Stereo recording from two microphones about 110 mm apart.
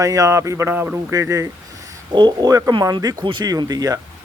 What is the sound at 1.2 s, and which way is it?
Speech, 30° right (ahead or behind).